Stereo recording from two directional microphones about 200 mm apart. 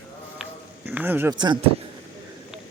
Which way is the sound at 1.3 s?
20° right (ahead or behind).